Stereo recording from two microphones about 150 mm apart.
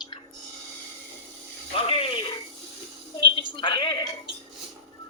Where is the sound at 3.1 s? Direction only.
35° left (ahead or behind).